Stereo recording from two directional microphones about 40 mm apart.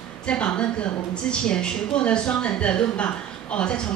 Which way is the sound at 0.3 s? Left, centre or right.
Left.